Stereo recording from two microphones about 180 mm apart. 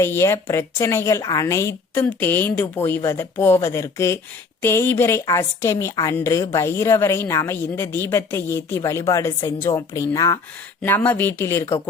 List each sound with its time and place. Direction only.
0.0 s a woman's voice: 15° left (ahead or behind)